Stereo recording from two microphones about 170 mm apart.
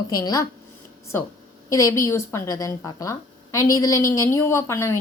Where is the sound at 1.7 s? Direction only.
20° left (ahead or behind).